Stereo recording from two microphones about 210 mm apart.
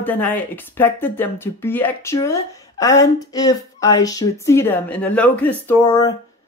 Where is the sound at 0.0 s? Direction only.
10° left (ahead or behind).